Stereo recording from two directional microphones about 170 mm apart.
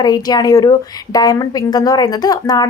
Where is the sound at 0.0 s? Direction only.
25° left (ahead or behind).